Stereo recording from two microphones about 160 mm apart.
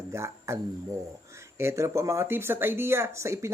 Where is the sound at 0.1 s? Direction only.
20° right (ahead or behind).